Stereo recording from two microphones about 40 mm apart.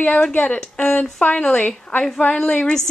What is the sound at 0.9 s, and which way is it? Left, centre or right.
Speech, left.